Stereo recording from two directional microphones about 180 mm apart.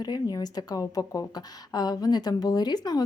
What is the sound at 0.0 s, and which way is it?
A woman's voice, 20° left (ahead or behind).